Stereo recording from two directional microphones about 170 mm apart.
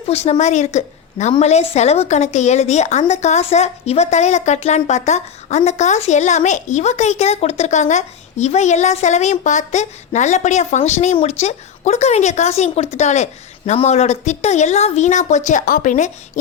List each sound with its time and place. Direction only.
0.1 s a woman's voice: 40° left (ahead or behind)